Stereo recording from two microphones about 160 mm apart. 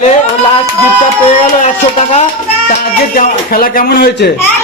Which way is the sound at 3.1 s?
60° left (ahead or behind).